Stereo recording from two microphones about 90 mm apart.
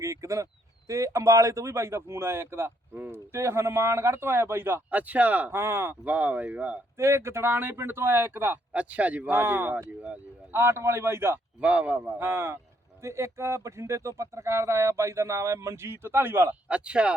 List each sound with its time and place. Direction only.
0.0 s a sound: 35° right (ahead or behind)
0.9 s speech: 35° right (ahead or behind)
6.1 s speech: 15° right (ahead or behind)
6.9 s speech: 30° right (ahead or behind)
11.6 s speech: 15° right (ahead or behind)
16.6 s speech: 10° right (ahead or behind)